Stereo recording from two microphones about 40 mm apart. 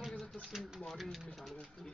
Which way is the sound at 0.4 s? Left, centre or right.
Centre.